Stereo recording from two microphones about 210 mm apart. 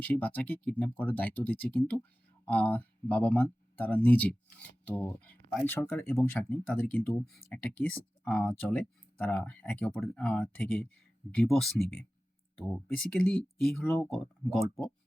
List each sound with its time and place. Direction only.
0.0 s speech: 10° left (ahead or behind)